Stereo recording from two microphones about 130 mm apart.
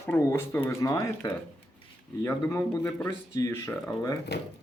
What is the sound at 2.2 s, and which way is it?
Speech, 20° left (ahead or behind).